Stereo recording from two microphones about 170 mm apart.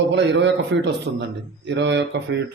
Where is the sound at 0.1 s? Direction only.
90° right.